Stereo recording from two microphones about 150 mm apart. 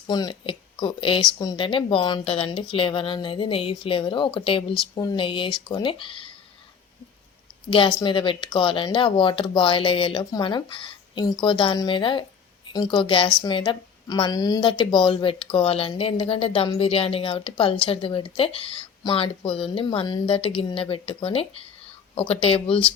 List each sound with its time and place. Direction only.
0.1 s a woman's voice: 25° left (ahead or behind)
7.7 s a woman's voice: 30° left (ahead or behind)